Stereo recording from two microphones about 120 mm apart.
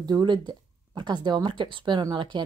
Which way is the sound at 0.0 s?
35° right (ahead or behind).